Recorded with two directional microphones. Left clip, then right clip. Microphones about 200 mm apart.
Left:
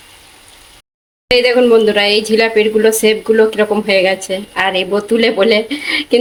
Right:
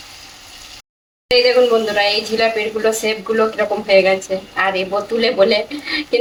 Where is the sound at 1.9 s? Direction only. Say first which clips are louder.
Left 4 dB; 55° left (ahead or behind).